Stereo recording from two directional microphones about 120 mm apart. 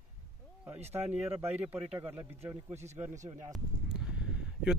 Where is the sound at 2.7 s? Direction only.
70° right (ahead or behind).